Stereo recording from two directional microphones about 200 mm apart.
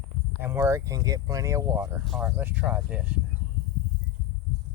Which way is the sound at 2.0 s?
Centre (ahead or behind).